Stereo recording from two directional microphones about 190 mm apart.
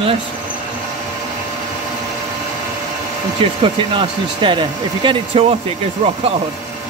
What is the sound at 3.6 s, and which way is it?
Speech, 25° right (ahead or behind).